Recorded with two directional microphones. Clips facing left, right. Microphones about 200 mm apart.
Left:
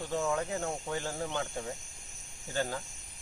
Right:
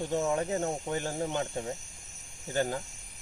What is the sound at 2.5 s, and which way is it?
Insect, 20° right (ahead or behind).